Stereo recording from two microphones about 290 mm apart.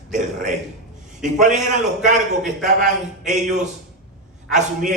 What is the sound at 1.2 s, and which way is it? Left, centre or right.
A man's voice, right.